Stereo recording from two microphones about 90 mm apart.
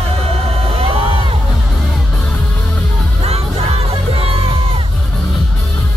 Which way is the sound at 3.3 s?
90° right.